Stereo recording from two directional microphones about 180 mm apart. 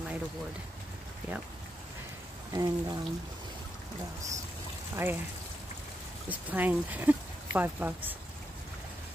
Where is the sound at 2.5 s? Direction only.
20° right (ahead or behind).